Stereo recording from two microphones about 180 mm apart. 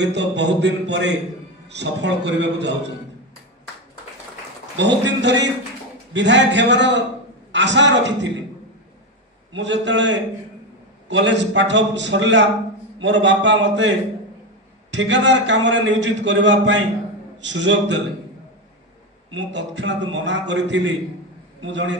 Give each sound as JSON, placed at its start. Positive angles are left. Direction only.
{"t": 0.0, "sound": "a man's voice", "side_deg": -75}
{"t": 4.7, "sound": "a man's voice", "side_deg": -80}
{"t": 9.5, "sound": "a man's voice", "side_deg": -90}
{"t": 19.3, "sound": "a man's voice", "side_deg": -90}